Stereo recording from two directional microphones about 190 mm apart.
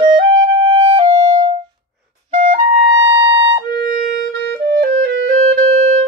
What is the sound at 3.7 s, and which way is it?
Music, 50° right (ahead or behind).